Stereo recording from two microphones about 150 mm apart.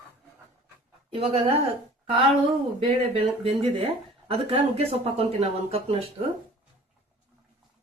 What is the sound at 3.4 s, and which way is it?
Speech, 40° right (ahead or behind).